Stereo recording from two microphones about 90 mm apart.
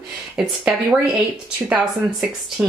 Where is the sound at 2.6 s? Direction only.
10° right (ahead or behind).